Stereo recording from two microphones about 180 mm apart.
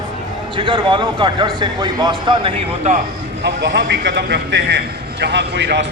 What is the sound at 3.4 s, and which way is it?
A man's voice, 75° right (ahead or behind).